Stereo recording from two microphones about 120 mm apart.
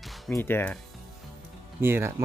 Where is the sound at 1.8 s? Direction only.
20° right (ahead or behind).